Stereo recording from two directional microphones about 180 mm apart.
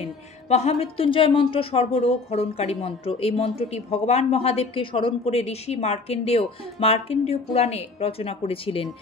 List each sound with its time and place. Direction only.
0.0 s a woman's voice: 35° left (ahead or behind)